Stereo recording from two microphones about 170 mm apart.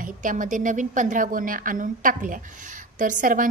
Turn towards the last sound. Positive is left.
turn(degrees=-50)  # may be behind; listen again after turning